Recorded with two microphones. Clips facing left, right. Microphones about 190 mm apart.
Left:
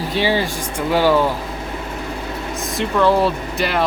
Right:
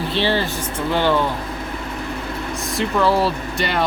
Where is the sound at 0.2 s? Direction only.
10° left (ahead or behind).